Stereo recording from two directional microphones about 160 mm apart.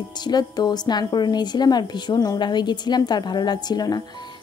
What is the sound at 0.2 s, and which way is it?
Speech, 25° left (ahead or behind).